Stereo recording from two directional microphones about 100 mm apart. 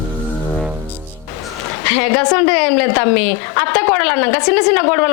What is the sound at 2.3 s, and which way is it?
A woman's voice, 20° left (ahead or behind).